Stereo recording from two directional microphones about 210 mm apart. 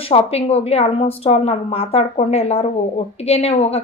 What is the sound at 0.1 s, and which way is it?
A woman's voice, 30° left (ahead or behind).